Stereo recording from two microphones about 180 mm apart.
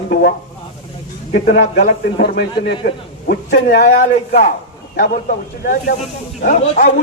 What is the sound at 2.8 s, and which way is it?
A man's voice, 55° left (ahead or behind).